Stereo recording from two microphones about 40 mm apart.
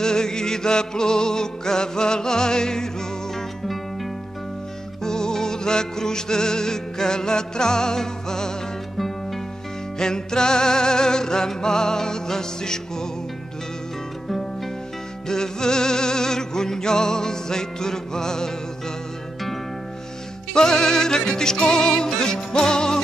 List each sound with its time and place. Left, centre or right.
0.0 s music: centre
3.6 s music: centre
5.0 s music: centre
8.9 s music: centre
9.9 s music: centre
15.2 s music: centre
20.5 s music: centre